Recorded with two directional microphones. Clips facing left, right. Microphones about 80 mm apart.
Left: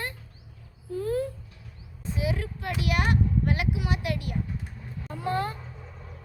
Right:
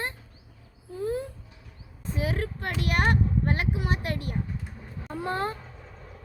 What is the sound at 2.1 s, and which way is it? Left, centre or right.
A child's voice, right.